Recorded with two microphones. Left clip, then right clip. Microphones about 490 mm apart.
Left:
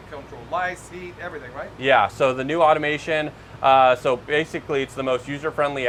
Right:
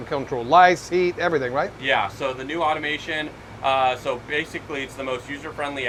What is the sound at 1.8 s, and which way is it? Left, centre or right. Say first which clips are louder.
Speech: left 9 dB; left.